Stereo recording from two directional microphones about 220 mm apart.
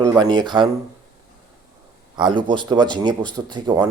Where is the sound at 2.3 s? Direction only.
20° right (ahead or behind).